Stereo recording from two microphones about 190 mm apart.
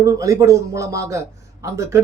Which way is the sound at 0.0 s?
20° right (ahead or behind).